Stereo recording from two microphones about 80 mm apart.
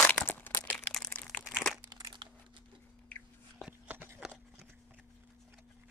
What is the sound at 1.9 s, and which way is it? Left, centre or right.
Crunch, right.